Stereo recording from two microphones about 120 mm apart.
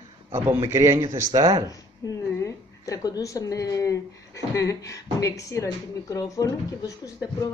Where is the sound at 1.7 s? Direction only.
30° left (ahead or behind).